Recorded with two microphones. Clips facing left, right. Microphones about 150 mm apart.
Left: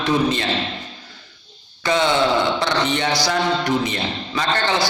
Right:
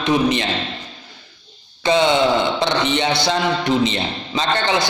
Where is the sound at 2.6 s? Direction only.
20° right (ahead or behind).